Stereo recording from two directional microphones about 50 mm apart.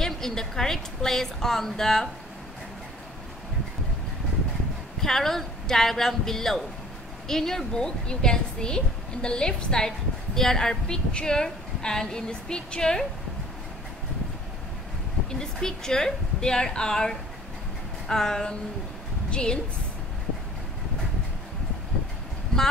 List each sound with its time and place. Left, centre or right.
0.0 s a woman's voice: centre
5.0 s a woman's voice: centre
15.6 s a woman's voice: centre